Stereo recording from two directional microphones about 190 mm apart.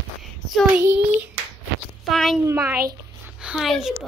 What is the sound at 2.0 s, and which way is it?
Speech, centre (ahead or behind).